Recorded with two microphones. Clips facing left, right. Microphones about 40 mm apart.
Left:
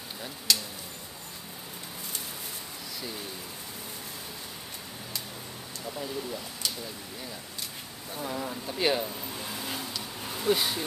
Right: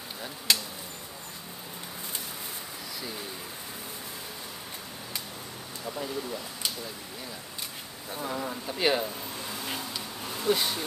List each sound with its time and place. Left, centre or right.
0.5 s speech: right
5.9 s speech: centre
8.1 s speech: centre
10.2 s a sound: centre